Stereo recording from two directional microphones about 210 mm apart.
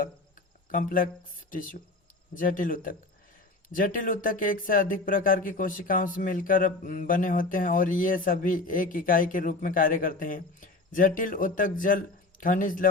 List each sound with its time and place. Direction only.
0.7 s speech: 40° left (ahead or behind)